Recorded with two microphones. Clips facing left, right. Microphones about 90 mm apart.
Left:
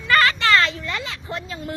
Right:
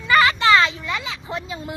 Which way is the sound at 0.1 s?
15° right (ahead or behind).